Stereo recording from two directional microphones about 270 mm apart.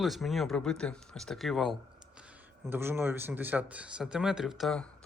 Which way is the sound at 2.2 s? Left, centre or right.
Centre.